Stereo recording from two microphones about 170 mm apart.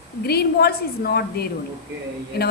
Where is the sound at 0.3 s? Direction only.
70° left (ahead or behind).